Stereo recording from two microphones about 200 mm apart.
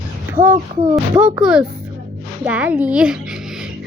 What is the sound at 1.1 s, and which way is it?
A child's voice, 5° right (ahead or behind).